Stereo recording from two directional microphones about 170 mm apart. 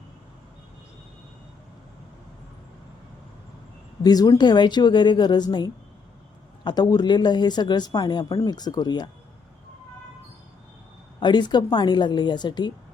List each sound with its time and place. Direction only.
4.0 s speech: 20° left (ahead or behind)
11.2 s speech: 25° left (ahead or behind)